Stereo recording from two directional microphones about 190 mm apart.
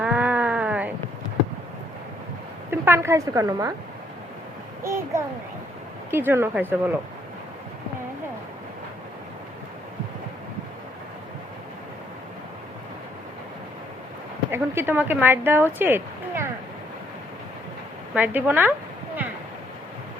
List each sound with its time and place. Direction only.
0.0 s sheep: 5° right (ahead or behind)
2.6 s a woman's voice: 15° right (ahead or behind)
4.8 s a child's voice: 15° right (ahead or behind)
14.5 s a woman's voice: 10° right (ahead or behind)
18.1 s speech: 10° right (ahead or behind)